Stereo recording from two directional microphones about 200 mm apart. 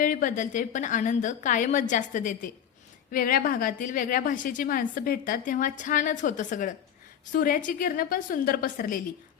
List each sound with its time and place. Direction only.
0.0 s a woman's voice: 40° left (ahead or behind)